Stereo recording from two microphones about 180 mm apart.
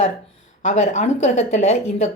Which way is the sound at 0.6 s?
40° left (ahead or behind).